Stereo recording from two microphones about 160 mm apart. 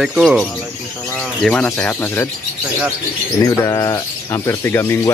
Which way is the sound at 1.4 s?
5° left (ahead or behind).